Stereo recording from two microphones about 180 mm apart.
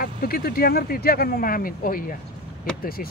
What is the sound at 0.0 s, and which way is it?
Speech, 55° left (ahead or behind).